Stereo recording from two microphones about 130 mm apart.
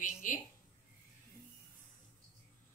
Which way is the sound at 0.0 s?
90° left.